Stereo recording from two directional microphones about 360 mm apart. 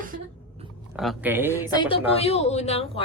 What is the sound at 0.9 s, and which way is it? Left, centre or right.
Speech, centre.